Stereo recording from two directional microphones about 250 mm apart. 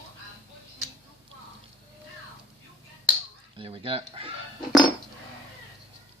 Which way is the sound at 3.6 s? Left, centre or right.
Right.